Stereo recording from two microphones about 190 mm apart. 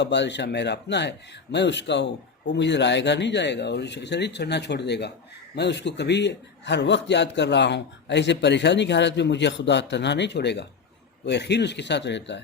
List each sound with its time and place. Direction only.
0.0 s a man's voice: 65° left (ahead or behind)